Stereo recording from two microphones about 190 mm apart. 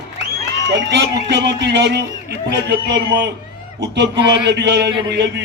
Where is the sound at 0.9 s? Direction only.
60° right (ahead or behind).